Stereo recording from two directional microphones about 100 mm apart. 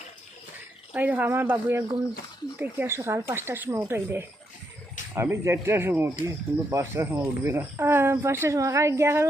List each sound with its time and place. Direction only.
0.9 s speech: 15° right (ahead or behind)